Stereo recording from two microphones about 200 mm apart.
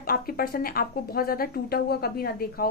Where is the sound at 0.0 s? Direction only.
45° left (ahead or behind).